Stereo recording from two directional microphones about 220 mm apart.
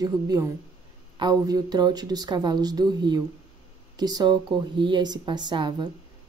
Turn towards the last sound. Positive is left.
turn(degrees=-20)  # may be behind; listen again after turning